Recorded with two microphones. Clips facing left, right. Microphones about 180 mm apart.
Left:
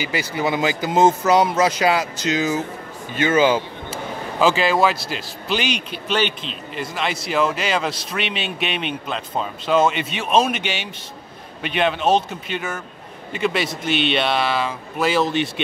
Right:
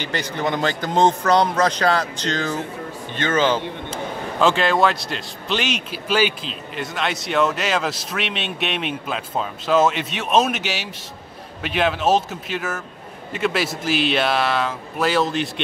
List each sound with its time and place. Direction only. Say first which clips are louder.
0.0 s a man's voice: left 1 dB; 10° left (ahead or behind)